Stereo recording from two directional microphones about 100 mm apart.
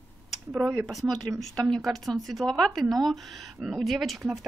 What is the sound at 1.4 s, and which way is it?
Speech, centre (ahead or behind).